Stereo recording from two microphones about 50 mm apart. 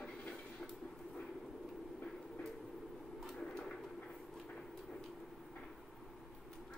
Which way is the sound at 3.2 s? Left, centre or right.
Centre.